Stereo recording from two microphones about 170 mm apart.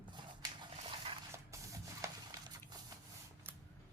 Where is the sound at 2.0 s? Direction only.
15° right (ahead or behind).